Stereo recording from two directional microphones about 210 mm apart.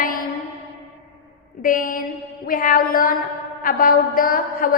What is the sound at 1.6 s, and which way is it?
A woman's voice, 40° left (ahead or behind).